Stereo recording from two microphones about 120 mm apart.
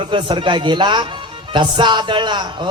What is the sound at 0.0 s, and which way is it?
A man's voice, 45° right (ahead or behind).